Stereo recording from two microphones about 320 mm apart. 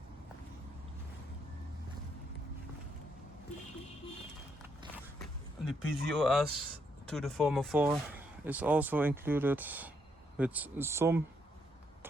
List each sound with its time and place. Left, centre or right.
5.6 s speech: centre